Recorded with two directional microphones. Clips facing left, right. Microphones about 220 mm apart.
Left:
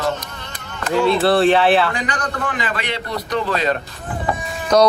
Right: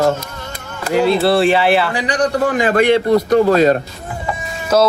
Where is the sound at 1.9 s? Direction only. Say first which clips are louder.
Right 8 dB; 35° right (ahead or behind).